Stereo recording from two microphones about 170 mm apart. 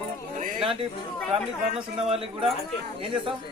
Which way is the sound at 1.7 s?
35° right (ahead or behind).